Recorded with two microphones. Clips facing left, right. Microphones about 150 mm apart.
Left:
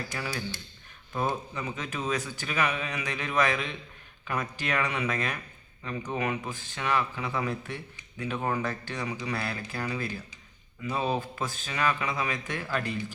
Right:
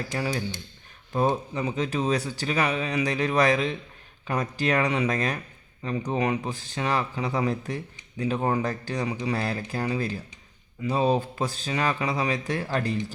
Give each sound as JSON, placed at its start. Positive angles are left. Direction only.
{"t": 0.1, "sound": "speech", "side_deg": -30}